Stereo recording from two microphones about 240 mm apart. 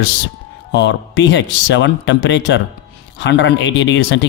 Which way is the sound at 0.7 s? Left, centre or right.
Left.